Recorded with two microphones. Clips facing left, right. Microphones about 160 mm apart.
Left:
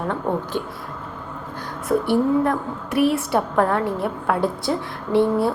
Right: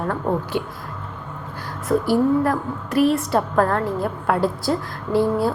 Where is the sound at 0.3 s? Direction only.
5° right (ahead or behind).